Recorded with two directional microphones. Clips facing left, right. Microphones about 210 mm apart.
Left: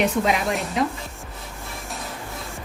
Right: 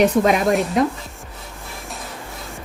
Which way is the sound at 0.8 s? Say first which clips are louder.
Right 3 dB; 45° right (ahead or behind).